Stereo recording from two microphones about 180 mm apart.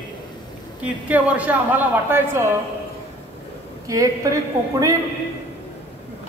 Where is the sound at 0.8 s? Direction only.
10° right (ahead or behind).